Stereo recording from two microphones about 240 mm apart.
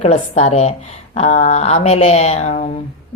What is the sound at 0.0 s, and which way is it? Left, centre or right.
A man's voice, left.